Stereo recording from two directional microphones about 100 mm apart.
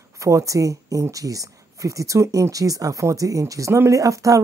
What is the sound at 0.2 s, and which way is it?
Speech, 30° right (ahead or behind).